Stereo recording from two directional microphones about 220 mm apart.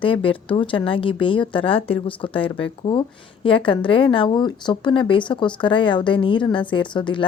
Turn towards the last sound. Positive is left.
turn(degrees=20)  # may be behind; listen again after turning